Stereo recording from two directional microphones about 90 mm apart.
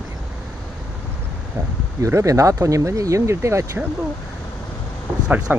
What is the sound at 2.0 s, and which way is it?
Speech, 35° right (ahead or behind).